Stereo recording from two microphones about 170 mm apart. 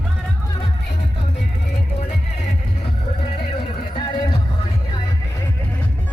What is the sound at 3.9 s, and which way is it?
Music, 25° left (ahead or behind).